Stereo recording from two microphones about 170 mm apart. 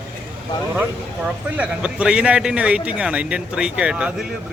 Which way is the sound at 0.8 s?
10° right (ahead or behind).